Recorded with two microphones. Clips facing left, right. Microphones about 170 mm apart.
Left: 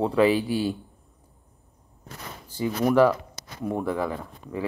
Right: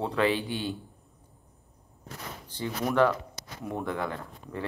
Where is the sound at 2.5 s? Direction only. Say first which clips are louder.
Left 7 dB; 10° left (ahead or behind).